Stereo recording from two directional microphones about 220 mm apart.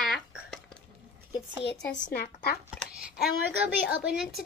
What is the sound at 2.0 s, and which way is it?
Speech, 40° left (ahead or behind).